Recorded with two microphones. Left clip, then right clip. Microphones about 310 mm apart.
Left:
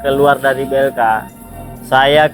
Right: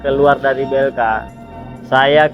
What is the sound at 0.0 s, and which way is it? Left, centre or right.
Speech, left.